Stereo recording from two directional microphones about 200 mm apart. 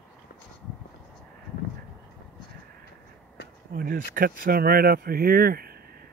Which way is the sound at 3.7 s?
45° right (ahead or behind).